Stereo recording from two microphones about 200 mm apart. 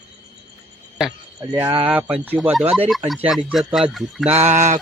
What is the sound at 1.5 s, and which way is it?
Speech, 15° right (ahead or behind).